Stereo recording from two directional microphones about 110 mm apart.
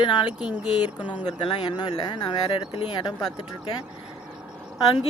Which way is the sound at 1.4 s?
40° left (ahead or behind).